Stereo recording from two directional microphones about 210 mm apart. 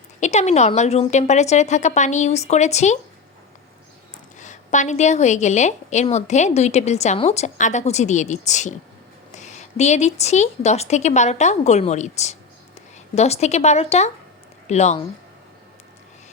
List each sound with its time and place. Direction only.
0.2 s a woman's voice: 30° left (ahead or behind)
4.4 s a woman's voice: 35° left (ahead or behind)